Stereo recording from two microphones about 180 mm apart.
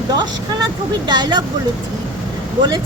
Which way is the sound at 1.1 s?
25° right (ahead or behind).